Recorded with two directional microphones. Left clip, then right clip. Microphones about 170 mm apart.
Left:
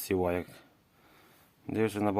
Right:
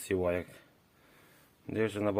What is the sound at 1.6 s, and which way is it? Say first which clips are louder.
Speech: left 2 dB; 20° left (ahead or behind).